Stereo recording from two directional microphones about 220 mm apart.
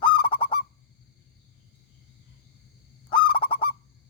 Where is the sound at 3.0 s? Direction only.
20° left (ahead or behind).